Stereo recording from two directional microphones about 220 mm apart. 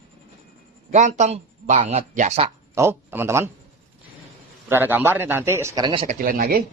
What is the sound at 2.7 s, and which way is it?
Speech, 10° right (ahead or behind).